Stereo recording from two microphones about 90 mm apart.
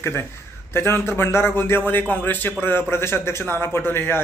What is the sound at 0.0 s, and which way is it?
Speech, 25° left (ahead or behind).